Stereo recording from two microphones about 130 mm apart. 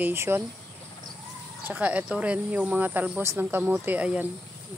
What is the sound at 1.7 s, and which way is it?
Speech, 10° right (ahead or behind).